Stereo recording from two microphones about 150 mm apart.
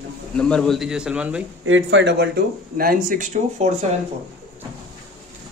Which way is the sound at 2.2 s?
85° right.